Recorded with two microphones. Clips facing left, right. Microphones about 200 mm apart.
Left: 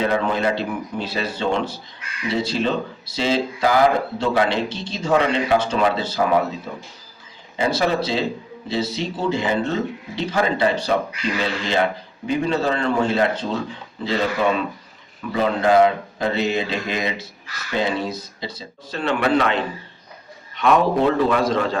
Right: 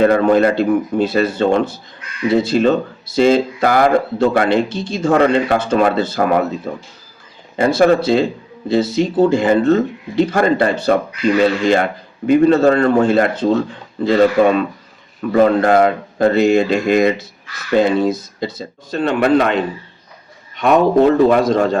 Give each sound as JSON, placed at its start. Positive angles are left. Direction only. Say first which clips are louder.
{"t": 0.0, "sound": "speech", "louder": "right 9 dB", "side_deg": -50}
{"t": 20.6, "sound": "speech", "louder": "right 5 dB", "side_deg": -45}